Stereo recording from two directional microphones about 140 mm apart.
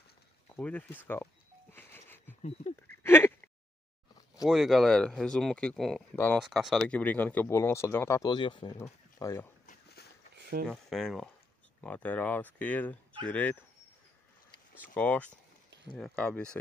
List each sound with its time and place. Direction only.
0.6 s a sound: 10° left (ahead or behind)
4.5 s speech: centre (ahead or behind); by 8.3 s 15° left (ahead or behind)
8.3 s speech: 35° left (ahead or behind)
9.2 s speech: 20° left (ahead or behind)
10.7 s speech: centre (ahead or behind)
14.8 s speech: 10° left (ahead or behind)